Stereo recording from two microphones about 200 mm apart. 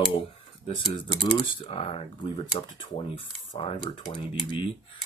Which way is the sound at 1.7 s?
25° left (ahead or behind).